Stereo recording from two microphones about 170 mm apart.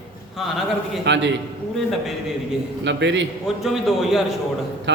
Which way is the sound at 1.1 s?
90° right.